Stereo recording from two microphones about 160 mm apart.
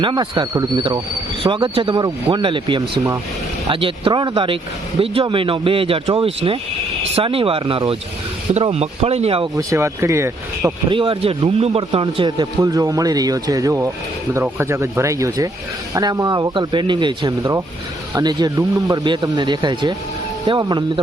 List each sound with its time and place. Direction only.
0.0 s speech: 30° right (ahead or behind)
9.6 s speech: 20° right (ahead or behind)
10.8 s speech: 35° right (ahead or behind)
12.4 s speech: 20° right (ahead or behind)